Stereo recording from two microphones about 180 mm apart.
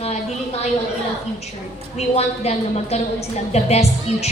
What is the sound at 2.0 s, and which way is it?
A woman's voice, 35° left (ahead or behind).